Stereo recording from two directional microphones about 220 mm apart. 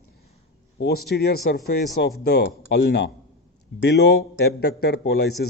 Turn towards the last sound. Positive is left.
turn(degrees=50)  # may be behind; listen again after turning